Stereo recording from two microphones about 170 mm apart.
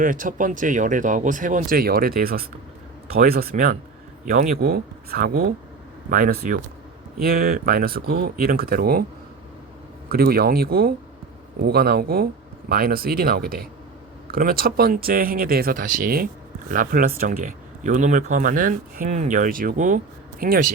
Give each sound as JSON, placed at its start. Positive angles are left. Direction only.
{"t": 0.0, "sound": "speech", "side_deg": -50}
{"t": 10.1, "sound": "speech", "side_deg": -65}